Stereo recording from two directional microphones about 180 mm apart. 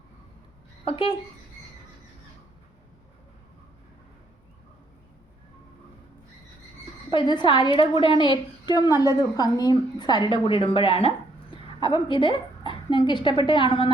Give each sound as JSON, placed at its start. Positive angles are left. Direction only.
{"t": 0.9, "sound": "a woman's voice", "side_deg": 30}
{"t": 7.1, "sound": "a woman's voice", "side_deg": 25}